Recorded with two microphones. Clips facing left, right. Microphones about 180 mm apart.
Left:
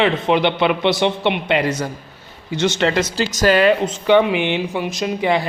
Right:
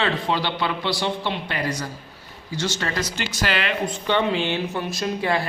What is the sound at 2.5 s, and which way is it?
Speech, 20° left (ahead or behind).